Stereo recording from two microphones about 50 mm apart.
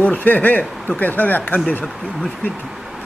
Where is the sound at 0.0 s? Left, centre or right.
Left.